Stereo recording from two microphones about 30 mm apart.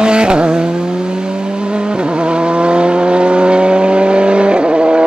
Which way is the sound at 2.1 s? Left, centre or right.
Right.